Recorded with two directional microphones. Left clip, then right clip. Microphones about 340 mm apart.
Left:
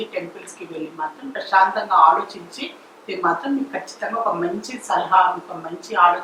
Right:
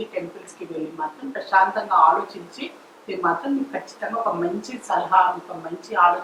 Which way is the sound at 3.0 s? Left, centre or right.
Centre.